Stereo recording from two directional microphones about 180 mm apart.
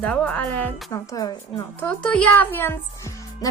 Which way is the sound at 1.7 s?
5° left (ahead or behind).